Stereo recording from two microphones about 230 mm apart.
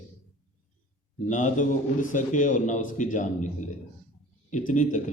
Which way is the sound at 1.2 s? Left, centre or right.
Left.